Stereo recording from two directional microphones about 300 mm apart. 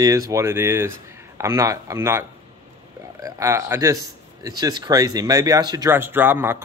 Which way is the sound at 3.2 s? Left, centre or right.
Centre.